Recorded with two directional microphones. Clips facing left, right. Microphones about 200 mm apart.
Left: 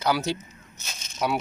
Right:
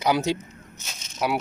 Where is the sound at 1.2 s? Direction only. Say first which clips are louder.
Right 1 dB; centre (ahead or behind).